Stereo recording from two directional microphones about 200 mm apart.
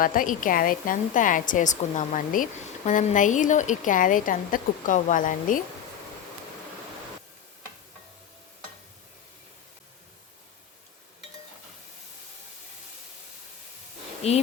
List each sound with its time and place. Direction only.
0.0 s a woman's voice: 45° left (ahead or behind)
14.2 s a woman's voice: 30° left (ahead or behind)